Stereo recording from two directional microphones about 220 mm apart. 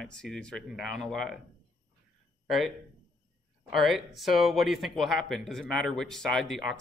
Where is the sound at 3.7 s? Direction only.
Centre (ahead or behind).